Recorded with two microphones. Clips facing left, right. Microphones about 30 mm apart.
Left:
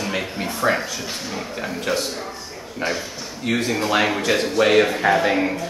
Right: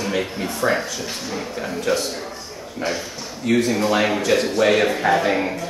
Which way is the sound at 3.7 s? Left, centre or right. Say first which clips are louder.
Right 1 dB; centre.